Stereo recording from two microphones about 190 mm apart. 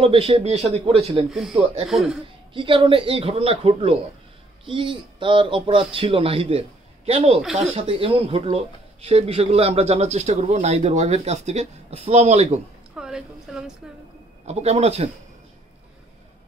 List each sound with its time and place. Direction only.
0.0 s speech: 30° right (ahead or behind)
1.9 s speech: centre (ahead or behind)
2.5 s speech: 25° right (ahead or behind)
12.9 s a woman's voice: 5° right (ahead or behind)
14.4 s speech: 35° right (ahead or behind)